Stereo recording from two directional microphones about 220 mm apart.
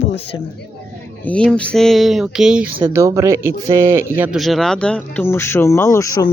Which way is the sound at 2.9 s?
15° right (ahead or behind).